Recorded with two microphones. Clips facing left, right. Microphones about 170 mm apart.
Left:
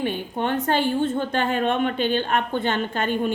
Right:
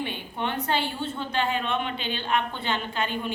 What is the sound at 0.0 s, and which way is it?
A woman's voice, 45° left (ahead or behind).